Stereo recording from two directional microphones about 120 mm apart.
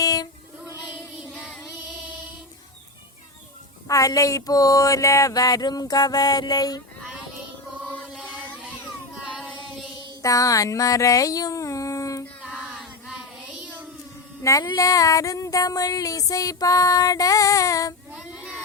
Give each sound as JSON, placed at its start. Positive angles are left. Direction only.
{"t": 0.0, "sound": "child singing", "side_deg": 30}
{"t": 1.3, "sound": "child singing", "side_deg": 5}
{"t": 3.8, "sound": "a sound", "side_deg": 30}
{"t": 9.6, "sound": "mantra", "side_deg": 0}
{"t": 10.2, "sound": "a sound", "side_deg": 30}
{"t": 12.5, "sound": "child singing", "side_deg": -5}
{"t": 14.4, "sound": "female singing", "side_deg": 25}
{"t": 18.1, "sound": "child singing", "side_deg": -10}